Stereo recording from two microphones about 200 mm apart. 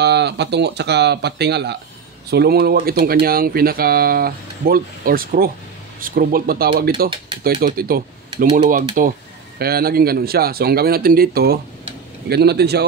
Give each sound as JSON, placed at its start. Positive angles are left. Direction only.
{"t": 0.0, "sound": "speech", "side_deg": -55}